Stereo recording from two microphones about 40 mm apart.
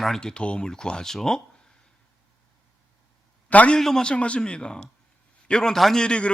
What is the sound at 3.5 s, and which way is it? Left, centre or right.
Speech, left.